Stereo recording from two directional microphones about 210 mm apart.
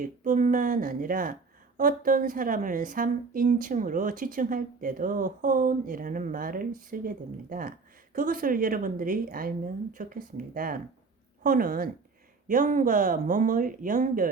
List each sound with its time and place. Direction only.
0.0 s speech: 35° right (ahead or behind)
8.1 s a woman's voice: 40° right (ahead or behind)